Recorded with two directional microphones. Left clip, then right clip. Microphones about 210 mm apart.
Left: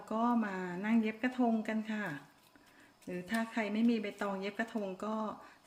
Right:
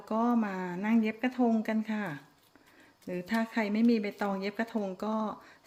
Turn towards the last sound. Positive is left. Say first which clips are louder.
# right 5 dB
turn(degrees=-25)  # may be behind; listen again after turning